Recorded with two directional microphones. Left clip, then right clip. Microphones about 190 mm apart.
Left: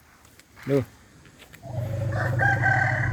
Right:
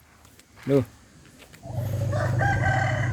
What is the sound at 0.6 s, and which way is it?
Speech, 5° right (ahead or behind).